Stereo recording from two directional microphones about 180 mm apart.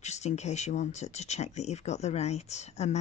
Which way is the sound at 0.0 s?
40° left (ahead or behind).